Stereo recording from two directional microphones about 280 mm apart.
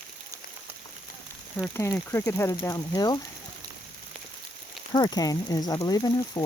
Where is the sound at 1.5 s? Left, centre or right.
Centre.